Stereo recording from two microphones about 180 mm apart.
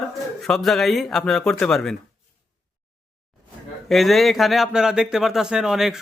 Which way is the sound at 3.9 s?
Centre (ahead or behind).